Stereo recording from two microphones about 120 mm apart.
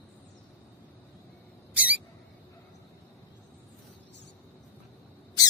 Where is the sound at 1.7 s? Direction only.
10° right (ahead or behind).